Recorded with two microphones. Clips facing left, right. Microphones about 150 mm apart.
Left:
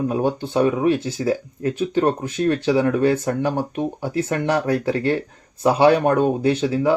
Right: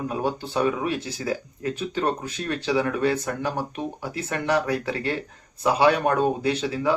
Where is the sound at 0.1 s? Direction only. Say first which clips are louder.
Left 5 dB; 25° left (ahead or behind).